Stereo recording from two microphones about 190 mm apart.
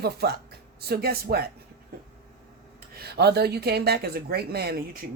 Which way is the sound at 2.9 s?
60° right (ahead or behind).